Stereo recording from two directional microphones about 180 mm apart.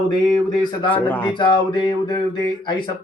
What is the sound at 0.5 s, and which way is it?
Speech, 25° left (ahead or behind).